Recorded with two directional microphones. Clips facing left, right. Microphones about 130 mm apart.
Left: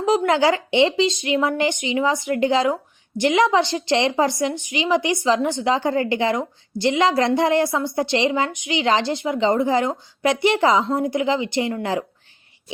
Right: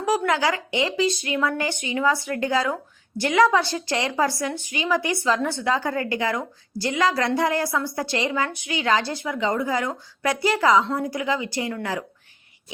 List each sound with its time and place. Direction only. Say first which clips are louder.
0.0 s speech: left 4 dB; 25° left (ahead or behind)